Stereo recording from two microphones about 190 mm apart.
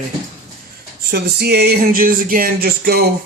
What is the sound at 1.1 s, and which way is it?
Speech, 55° right (ahead or behind).